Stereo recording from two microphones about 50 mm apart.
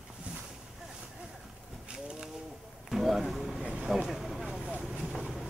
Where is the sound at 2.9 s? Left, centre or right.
Centre.